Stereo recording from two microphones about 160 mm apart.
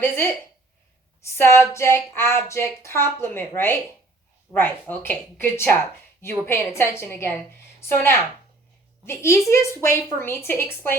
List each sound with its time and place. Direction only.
0.0 s a woman's voice: 15° left (ahead or behind)